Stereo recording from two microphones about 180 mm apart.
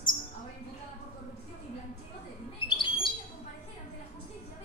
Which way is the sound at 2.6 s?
25° left (ahead or behind).